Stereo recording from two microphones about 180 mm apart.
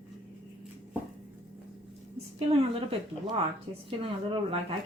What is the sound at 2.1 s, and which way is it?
Speech, 30° right (ahead or behind).